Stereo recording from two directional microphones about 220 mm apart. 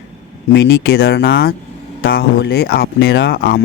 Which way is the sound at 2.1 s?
45° left (ahead or behind).